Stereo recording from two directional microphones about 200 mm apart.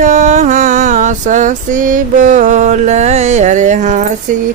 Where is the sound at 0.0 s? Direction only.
40° right (ahead or behind).